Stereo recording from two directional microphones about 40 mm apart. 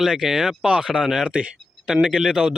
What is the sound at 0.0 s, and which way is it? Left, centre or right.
Speech, centre.